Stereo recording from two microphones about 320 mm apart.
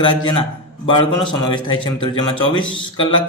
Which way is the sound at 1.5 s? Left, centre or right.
Centre.